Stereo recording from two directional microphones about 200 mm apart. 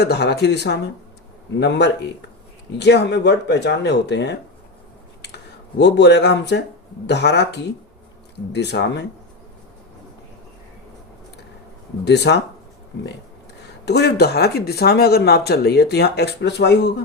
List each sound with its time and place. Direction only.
0.0 s speech: 55° left (ahead or behind)
12.0 s speech: 60° left (ahead or behind)
13.8 s speech: 55° left (ahead or behind)